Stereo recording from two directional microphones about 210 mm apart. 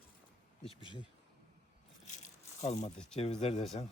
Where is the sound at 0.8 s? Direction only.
25° left (ahead or behind).